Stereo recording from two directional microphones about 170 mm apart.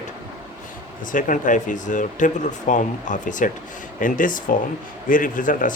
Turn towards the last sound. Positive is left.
turn(degrees=50)  # may be behind; listen again after turning